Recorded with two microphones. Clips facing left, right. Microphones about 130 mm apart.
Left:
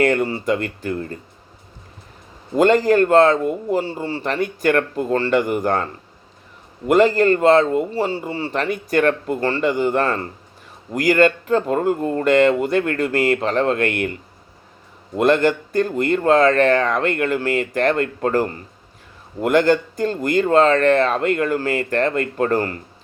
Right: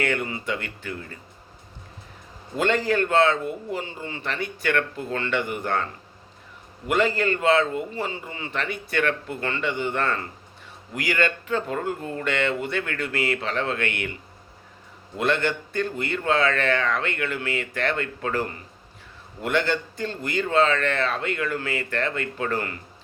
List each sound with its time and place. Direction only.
0.0 s a man's voice: 40° left (ahead or behind)
2.6 s a man's voice: 40° left (ahead or behind)